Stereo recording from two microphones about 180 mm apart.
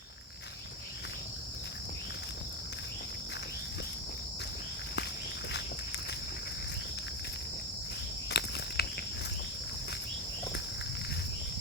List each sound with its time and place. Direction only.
8.3 s insect: 65° left (ahead or behind)